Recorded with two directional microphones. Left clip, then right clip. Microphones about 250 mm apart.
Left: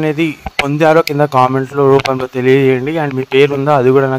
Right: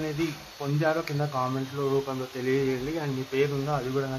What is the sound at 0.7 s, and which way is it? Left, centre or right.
Speech, left.